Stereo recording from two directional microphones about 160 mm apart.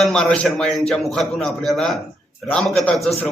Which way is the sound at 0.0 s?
5° left (ahead or behind).